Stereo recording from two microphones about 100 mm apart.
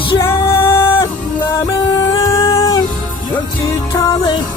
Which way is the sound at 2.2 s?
35° left (ahead or behind).